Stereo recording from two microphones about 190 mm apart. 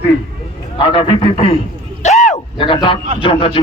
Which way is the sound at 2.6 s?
25° left (ahead or behind).